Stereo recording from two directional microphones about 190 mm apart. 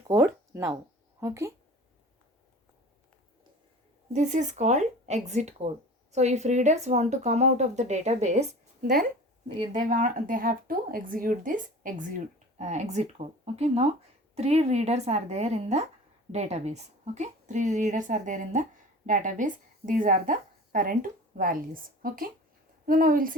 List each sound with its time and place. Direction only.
0.1 s speech: 15° right (ahead or behind)
4.1 s a woman's voice: 40° right (ahead or behind)